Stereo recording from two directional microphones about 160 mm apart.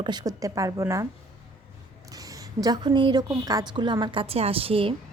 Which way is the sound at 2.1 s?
20° right (ahead or behind).